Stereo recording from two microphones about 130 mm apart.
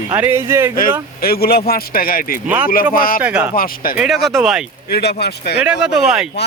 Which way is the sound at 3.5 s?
90° left.